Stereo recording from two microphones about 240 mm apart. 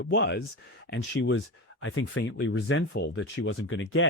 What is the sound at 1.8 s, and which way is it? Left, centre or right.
Speech, left.